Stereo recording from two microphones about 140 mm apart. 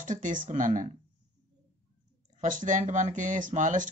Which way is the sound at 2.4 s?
65° right (ahead or behind).